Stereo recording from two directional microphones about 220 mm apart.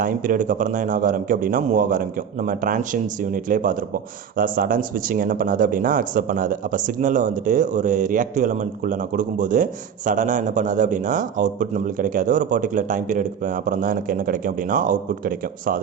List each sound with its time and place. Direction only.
0.0 s a man's voice: 40° right (ahead or behind)